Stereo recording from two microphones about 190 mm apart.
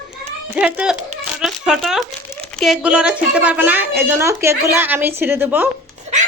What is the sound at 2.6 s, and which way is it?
A woman's voice, centre (ahead or behind).